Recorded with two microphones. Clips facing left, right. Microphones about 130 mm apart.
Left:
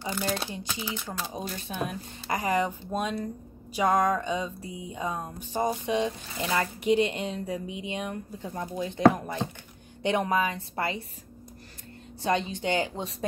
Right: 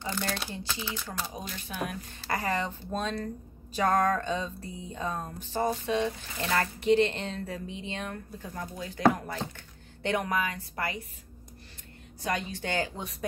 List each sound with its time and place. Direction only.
0.2 s a woman's voice: 25° left (ahead or behind)
12.2 s a woman's voice: 25° left (ahead or behind)